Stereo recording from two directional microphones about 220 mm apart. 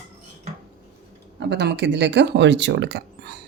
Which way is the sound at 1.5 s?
50° right (ahead or behind).